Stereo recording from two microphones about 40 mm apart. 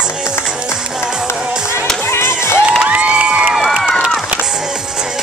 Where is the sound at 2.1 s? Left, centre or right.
Left.